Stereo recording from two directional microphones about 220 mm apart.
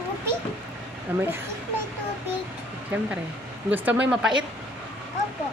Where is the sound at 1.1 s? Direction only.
10° right (ahead or behind).